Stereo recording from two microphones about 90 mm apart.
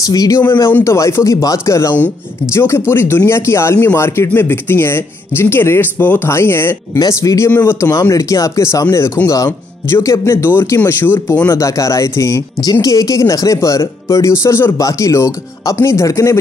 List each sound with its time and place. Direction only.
0.0 s speech: 40° left (ahead or behind); by 6.8 s 25° left (ahead or behind)
7.0 s speech: 40° left (ahead or behind)
7.9 s speech: 40° left (ahead or behind); by 11.4 s 25° left (ahead or behind)
11.4 s speech: 35° left (ahead or behind)